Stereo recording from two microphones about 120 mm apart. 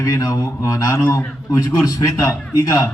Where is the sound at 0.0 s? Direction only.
30° left (ahead or behind).